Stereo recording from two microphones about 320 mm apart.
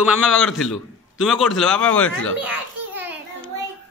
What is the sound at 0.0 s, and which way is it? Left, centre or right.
A man's voice, centre.